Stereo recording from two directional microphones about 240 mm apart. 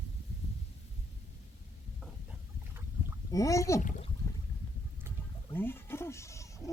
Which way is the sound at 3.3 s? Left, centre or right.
Centre.